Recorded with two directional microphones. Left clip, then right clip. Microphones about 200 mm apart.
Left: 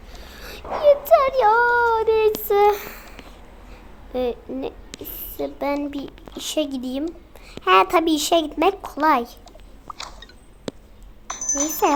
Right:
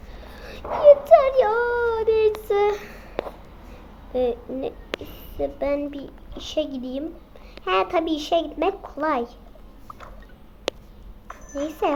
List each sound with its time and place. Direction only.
0.2 s child singing: 15° left (ahead or behind)
4.1 s a child's voice: 15° left (ahead or behind)
11.3 s a sound: 20° left (ahead or behind)